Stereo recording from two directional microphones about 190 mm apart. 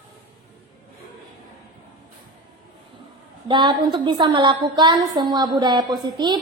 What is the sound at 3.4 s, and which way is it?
A woman's voice, 25° right (ahead or behind).